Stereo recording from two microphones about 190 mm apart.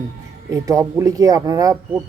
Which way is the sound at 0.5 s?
20° right (ahead or behind).